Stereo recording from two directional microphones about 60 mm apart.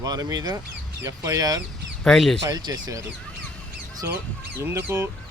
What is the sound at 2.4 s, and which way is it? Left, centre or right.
Speech, right.